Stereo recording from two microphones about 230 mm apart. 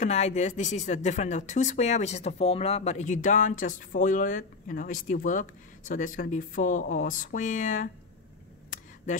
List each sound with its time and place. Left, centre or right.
0.0 s speech: left